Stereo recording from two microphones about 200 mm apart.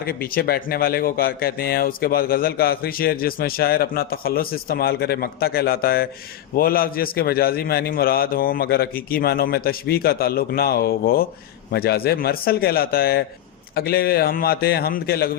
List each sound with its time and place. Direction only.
0.0 s speech: 50° left (ahead or behind)